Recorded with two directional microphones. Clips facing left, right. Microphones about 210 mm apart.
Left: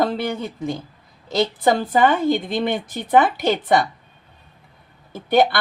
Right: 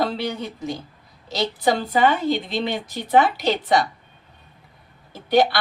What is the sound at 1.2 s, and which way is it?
A woman's voice, 50° left (ahead or behind).